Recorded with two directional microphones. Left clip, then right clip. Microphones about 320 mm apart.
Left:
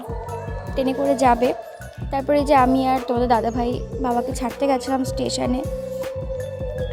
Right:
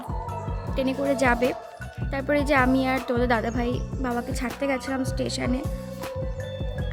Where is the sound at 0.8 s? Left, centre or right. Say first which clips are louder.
Left 5 dB; centre.